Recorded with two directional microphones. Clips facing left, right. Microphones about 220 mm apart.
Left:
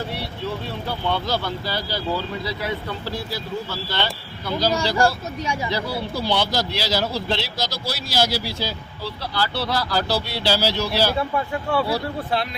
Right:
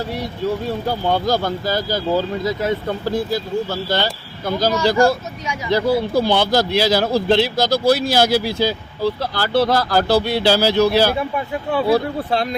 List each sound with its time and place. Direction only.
0.1 s speech: 45° right (ahead or behind)
5.7 s speech: 50° right (ahead or behind)
11.2 s speech: 20° right (ahead or behind)